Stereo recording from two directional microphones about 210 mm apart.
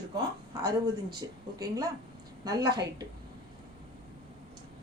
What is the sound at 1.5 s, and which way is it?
A woman's voice, 15° right (ahead or behind).